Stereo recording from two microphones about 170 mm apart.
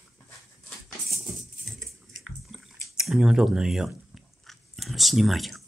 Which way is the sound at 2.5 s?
Centre (ahead or behind).